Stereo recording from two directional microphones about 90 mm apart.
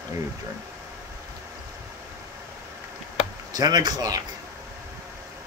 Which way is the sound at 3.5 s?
50° right (ahead or behind).